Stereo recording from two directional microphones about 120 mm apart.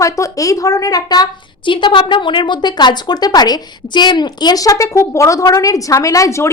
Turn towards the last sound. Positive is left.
turn(degrees=25)  # may be behind; listen again after turning